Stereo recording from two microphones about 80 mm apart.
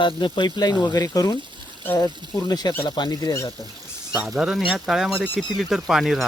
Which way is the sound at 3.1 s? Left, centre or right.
Left.